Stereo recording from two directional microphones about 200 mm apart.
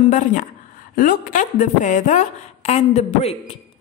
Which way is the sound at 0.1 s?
40° left (ahead or behind).